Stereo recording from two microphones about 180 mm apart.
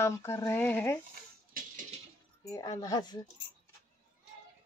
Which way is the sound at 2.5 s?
20° left (ahead or behind).